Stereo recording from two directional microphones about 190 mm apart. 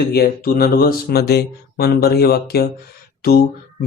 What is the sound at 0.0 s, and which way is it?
Speech, 55° left (ahead or behind).